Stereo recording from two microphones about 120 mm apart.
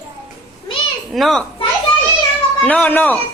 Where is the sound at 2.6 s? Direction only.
15° left (ahead or behind).